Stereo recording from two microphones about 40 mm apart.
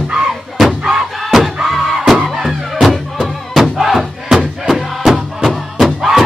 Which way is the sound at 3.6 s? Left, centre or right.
Centre.